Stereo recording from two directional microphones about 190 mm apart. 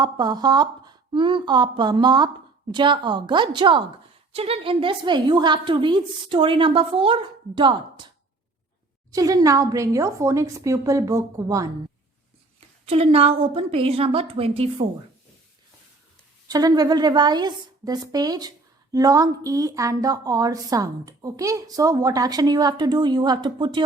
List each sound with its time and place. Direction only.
0.0 s a woman's voice: 20° right (ahead or behind)
9.1 s a woman's voice: 20° right (ahead or behind)
12.5 s a woman's voice: 30° right (ahead or behind)
16.5 s a woman's voice: 20° right (ahead or behind)